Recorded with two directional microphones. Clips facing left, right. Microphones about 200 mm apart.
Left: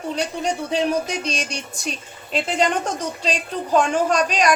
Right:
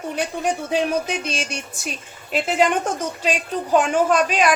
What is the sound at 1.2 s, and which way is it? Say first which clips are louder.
A woman's voice: even; 5° right (ahead or behind).